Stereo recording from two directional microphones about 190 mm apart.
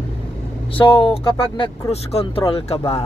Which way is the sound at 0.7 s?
30° left (ahead or behind).